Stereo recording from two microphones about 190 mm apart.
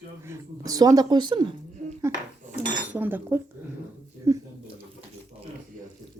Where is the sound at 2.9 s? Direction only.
10° right (ahead or behind).